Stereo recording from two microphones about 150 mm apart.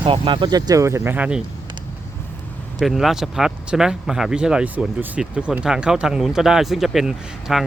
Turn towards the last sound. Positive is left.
turn(degrees=-5)  # may be behind; listen again after turning